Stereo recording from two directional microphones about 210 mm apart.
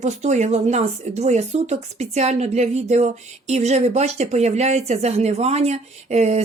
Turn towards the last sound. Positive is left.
turn(degrees=-30)  # may be behind; listen again after turning